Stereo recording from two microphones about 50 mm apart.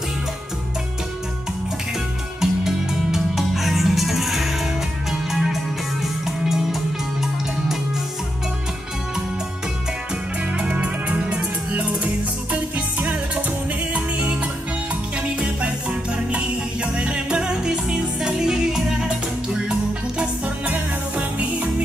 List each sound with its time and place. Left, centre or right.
2.4 s music: centre
10.6 s music: right
13.9 s music: right
20.2 s music: right